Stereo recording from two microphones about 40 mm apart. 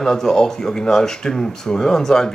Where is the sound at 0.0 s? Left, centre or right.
Centre.